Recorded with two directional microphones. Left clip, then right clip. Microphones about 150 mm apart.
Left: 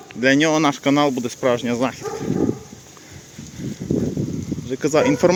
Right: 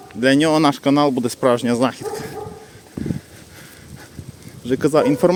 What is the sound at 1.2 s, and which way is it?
Speech, 35° right (ahead or behind).